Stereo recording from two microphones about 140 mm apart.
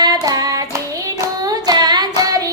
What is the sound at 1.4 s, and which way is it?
Child singing, 30° right (ahead or behind).